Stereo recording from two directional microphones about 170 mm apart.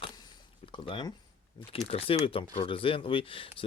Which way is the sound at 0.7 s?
30° left (ahead or behind).